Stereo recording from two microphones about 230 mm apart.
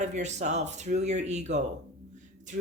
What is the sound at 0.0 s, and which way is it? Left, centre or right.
Speech, right.